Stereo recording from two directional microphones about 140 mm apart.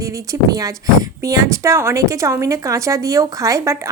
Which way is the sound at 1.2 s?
20° right (ahead or behind).